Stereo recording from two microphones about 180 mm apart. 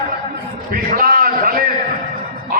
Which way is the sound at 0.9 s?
55° right (ahead or behind).